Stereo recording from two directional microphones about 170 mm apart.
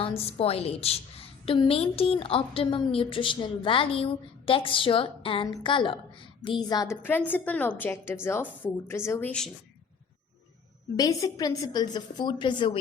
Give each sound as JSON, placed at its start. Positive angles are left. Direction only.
{"t": 0.2, "sound": "a woman's voice", "side_deg": 35}
{"t": 10.9, "sound": "a woman's voice", "side_deg": 20}